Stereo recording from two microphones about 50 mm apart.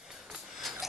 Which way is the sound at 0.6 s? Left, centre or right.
Centre.